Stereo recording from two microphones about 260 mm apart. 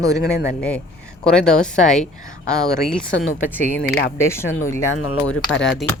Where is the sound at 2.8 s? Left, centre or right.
Centre.